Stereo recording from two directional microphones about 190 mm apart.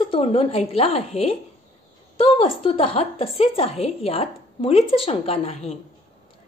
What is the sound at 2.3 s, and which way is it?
A woman's voice, 30° left (ahead or behind).